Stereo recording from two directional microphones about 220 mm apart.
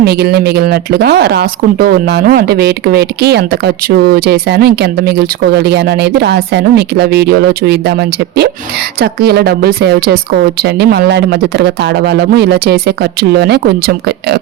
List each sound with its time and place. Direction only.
0.0 s speech: 45° right (ahead or behind)
9.0 s speech: 45° right (ahead or behind)